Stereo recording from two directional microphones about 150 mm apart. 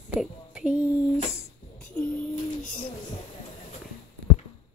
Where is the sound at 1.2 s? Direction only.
45° left (ahead or behind).